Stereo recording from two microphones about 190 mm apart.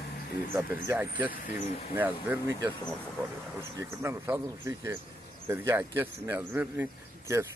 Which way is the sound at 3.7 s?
15° right (ahead or behind).